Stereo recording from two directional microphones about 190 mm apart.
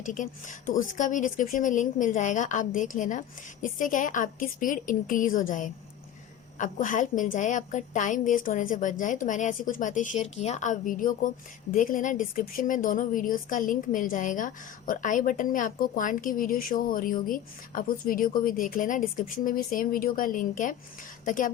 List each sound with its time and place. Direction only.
0.0 s a woman's voice: 40° left (ahead or behind)